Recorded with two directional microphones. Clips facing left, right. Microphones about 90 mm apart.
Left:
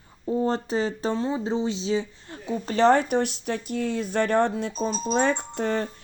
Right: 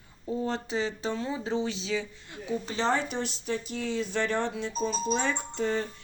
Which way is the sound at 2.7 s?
55° left (ahead or behind).